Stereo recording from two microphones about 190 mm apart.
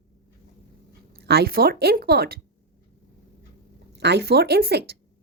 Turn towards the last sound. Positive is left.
turn(degrees=-60)  # may be behind; listen again after turning